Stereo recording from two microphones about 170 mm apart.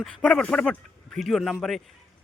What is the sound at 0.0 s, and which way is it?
A man's voice, 5° left (ahead or behind).